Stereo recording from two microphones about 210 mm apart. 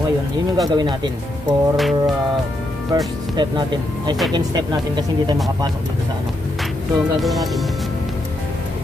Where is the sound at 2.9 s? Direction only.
20° right (ahead or behind).